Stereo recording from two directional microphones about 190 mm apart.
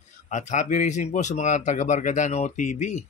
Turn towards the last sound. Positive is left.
turn(degrees=40)  # may be behind; listen again after turning